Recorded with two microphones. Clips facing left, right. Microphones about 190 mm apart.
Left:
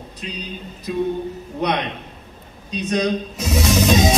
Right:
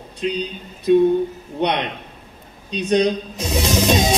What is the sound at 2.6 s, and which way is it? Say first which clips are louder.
Speech: right 3 dB; 30° right (ahead or behind).